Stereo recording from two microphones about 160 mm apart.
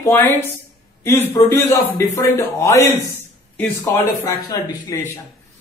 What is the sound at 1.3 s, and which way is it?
A man's voice, 20° left (ahead or behind).